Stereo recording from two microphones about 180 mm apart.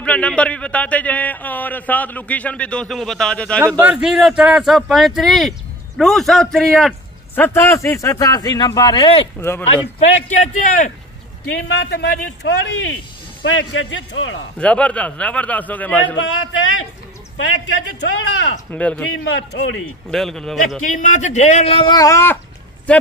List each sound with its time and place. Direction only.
0.0 s a man's voice: 5° left (ahead or behind)
3.8 s a man's voice: 5° right (ahead or behind); by 9.3 s 30° left (ahead or behind)
9.4 s a man's voice: 10° left (ahead or behind)
9.9 s a man's voice: 40° left (ahead or behind)
11.5 s speech: 70° left (ahead or behind); by 14.4 s 90° left
14.6 s a man's voice: 5° left (ahead or behind)
16.2 s a man's voice: 90° left
18.7 s a man's voice: 10° left (ahead or behind)
19.3 s speech: 70° left (ahead or behind)
20.1 s speech: 5° left (ahead or behind)
20.8 s a man's voice: 45° left (ahead or behind); by 22.4 s 15° left (ahead or behind)